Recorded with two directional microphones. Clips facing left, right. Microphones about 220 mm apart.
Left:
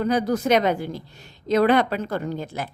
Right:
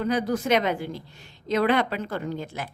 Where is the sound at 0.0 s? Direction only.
40° left (ahead or behind).